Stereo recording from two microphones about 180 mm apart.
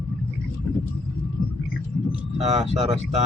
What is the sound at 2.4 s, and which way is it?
Speech, 35° right (ahead or behind).